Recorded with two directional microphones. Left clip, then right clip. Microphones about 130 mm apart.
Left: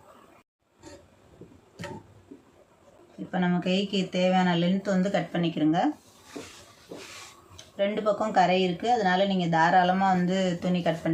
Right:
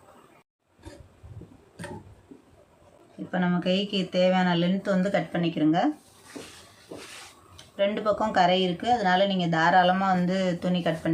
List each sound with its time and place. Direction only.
3.3 s speech: 25° right (ahead or behind)
7.5 s speech: 30° right (ahead or behind)